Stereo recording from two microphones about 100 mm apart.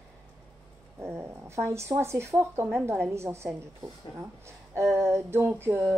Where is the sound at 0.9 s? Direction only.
25° right (ahead or behind).